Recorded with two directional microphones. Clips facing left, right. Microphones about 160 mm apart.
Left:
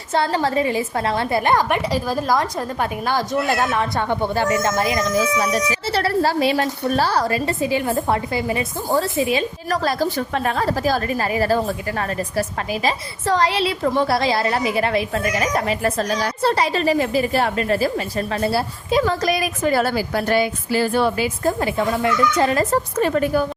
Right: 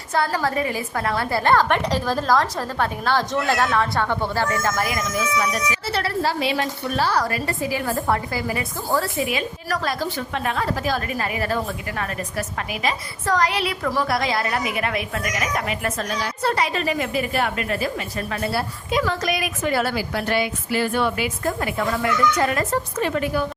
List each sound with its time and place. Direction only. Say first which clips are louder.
0.1 s a woman's voice: left 3 dB; 25° left (ahead or behind); by 23.4 s 40° left (ahead or behind)